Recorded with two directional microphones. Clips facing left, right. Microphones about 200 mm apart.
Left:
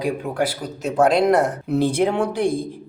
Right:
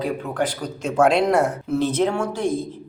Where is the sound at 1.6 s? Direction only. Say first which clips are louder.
Left 2 dB; 15° left (ahead or behind).